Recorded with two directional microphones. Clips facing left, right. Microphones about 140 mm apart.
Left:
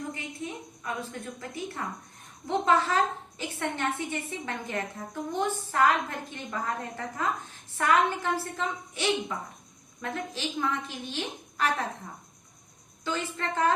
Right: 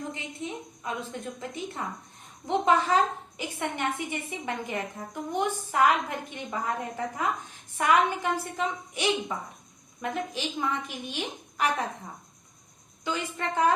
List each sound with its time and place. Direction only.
0.1 s a woman's voice: 20° right (ahead or behind)
13.1 s a woman's voice: 15° right (ahead or behind)